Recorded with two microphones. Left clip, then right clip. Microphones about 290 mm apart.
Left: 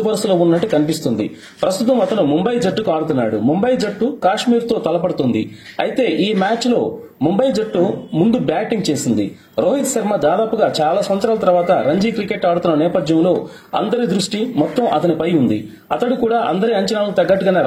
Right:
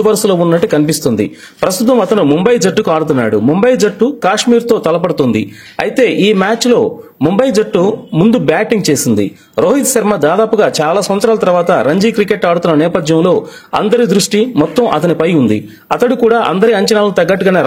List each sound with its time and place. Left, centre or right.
0.0 s a man's voice: right